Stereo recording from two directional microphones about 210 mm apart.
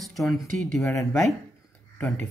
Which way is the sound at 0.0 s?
Centre (ahead or behind).